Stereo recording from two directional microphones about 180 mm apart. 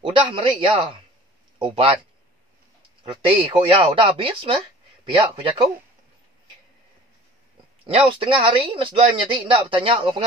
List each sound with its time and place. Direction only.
0.0 s speech: 25° right (ahead or behind)
3.1 s speech: 30° right (ahead or behind)
8.2 s speech: 30° right (ahead or behind)